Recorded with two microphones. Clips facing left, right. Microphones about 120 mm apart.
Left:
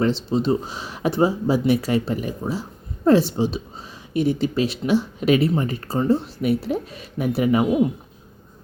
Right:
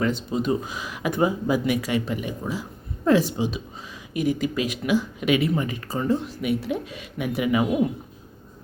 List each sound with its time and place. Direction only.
0.0 s speech: 30° left (ahead or behind)